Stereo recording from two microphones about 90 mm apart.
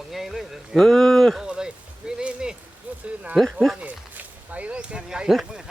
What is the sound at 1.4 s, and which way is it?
Speech, 10° right (ahead or behind).